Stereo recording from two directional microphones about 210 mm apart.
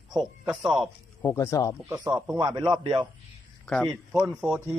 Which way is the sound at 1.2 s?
15° left (ahead or behind).